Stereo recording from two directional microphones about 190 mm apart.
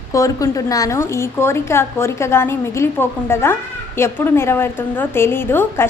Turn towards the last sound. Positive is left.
turn(degrees=10)  # may be behind; listen again after turning